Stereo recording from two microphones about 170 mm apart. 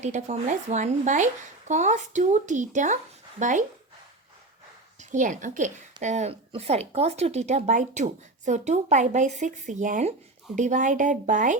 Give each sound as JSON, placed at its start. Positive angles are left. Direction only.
{"t": 0.0, "sound": "speech", "side_deg": -45}
{"t": 4.9, "sound": "a woman's voice", "side_deg": -45}